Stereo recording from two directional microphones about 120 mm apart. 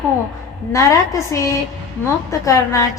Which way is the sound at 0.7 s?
25° left (ahead or behind).